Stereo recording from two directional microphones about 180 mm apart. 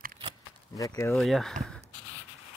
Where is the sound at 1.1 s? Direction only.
Centre (ahead or behind).